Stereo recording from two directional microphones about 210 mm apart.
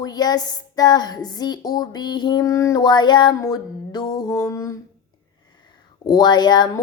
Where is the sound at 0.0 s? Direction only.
20° left (ahead or behind).